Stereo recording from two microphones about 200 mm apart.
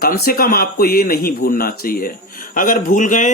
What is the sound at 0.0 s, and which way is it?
Speech, 45° left (ahead or behind).